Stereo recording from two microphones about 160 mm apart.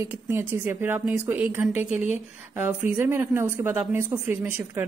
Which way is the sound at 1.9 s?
45° left (ahead or behind).